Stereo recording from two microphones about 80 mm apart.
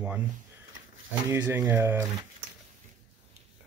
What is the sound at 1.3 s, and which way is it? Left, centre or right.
Speech, right.